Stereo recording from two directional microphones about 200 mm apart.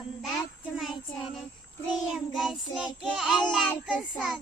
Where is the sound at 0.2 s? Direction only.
Centre (ahead or behind).